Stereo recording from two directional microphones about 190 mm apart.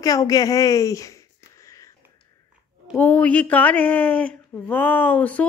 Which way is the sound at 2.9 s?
10° left (ahead or behind).